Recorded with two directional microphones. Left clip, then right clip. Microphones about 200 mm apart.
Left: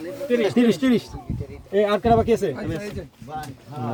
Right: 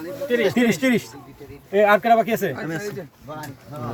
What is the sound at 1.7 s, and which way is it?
Speech, 30° right (ahead or behind).